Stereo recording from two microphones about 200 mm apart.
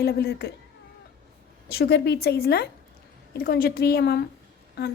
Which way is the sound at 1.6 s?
55° left (ahead or behind).